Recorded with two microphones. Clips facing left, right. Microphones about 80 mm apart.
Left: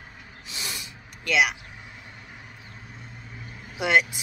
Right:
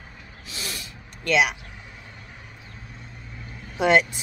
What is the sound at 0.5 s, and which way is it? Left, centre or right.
Snort, centre.